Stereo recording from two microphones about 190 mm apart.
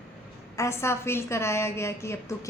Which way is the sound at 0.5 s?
15° left (ahead or behind).